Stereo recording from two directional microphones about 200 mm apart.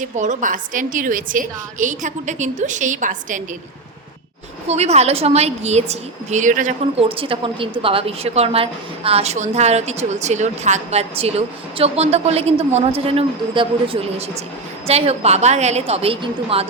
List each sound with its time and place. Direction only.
0.0 s a woman's voice: 40° right (ahead or behind)
4.7 s a woman's voice: 35° right (ahead or behind)